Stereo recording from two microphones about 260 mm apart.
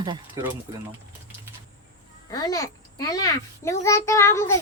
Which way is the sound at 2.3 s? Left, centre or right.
Centre.